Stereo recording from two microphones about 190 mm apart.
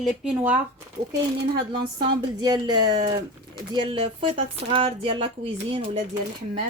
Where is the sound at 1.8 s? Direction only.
25° right (ahead or behind).